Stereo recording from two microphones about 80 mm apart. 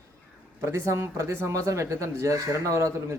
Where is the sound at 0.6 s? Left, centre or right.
Right.